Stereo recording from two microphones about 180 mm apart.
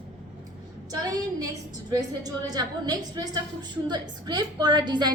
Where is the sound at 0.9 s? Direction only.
20° right (ahead or behind).